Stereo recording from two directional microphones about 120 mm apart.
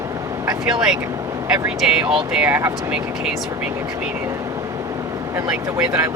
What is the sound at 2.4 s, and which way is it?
Speech, 20° right (ahead or behind).